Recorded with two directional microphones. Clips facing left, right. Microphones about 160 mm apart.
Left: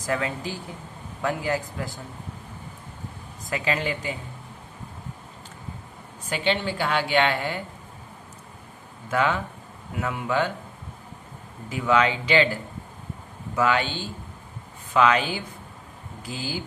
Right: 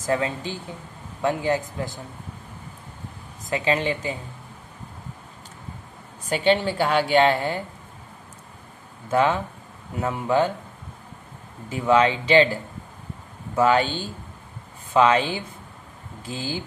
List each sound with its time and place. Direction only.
0.0 s a man's voice: 25° right (ahead or behind)
3.5 s a man's voice: 25° right (ahead or behind)
6.3 s a woman's voice: 40° right (ahead or behind)
9.0 s a man's voice: 30° right (ahead or behind)
11.7 s a woman's voice: 30° right (ahead or behind)
13.6 s a woman's voice: 35° right (ahead or behind)
14.9 s a man's voice: 30° right (ahead or behind)